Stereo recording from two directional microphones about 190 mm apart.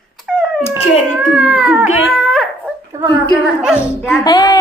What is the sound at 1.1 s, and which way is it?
Baby cry, 5° right (ahead or behind).